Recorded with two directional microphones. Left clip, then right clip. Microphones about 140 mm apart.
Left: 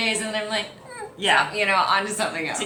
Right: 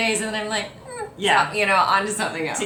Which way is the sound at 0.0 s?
20° right (ahead or behind).